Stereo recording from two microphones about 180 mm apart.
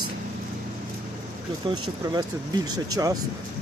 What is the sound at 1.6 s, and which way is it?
Speech, 25° right (ahead or behind).